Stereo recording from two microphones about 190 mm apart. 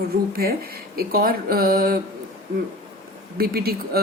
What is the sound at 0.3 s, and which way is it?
Speech, 55° right (ahead or behind).